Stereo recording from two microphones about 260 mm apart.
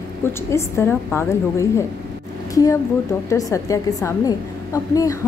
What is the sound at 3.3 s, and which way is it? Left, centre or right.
A woman's voice, centre.